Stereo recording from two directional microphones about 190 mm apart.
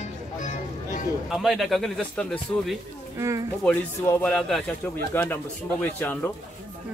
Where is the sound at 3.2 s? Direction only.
15° right (ahead or behind).